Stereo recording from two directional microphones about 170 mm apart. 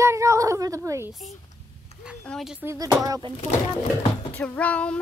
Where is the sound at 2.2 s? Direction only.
Centre (ahead or behind).